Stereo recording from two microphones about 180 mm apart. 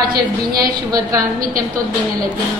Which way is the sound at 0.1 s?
55° right (ahead or behind).